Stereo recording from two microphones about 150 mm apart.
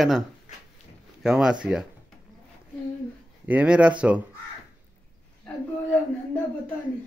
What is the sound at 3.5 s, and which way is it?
Speech, 10° right (ahead or behind).